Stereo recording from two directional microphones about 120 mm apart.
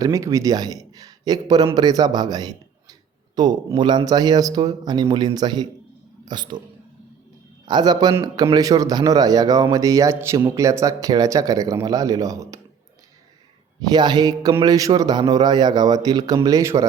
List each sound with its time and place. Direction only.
0.0 s a man's voice: 25° right (ahead or behind)
7.6 s a man's voice: 35° right (ahead or behind)
13.9 s a man's voice: 35° right (ahead or behind)